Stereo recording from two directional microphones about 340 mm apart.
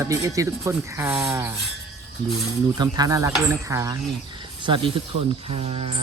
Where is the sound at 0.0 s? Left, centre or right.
Centre.